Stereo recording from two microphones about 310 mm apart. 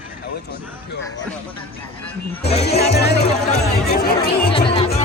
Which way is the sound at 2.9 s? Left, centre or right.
Left.